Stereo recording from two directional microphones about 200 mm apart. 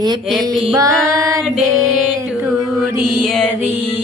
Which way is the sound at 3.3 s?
Centre (ahead or behind).